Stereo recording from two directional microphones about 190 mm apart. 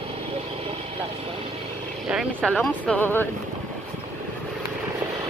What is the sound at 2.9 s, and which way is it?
Speech, 10° left (ahead or behind).